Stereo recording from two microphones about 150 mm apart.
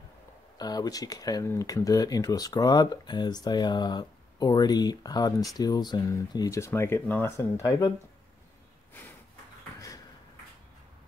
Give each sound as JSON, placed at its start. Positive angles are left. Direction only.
{"t": 0.6, "sound": "speech", "side_deg": 25}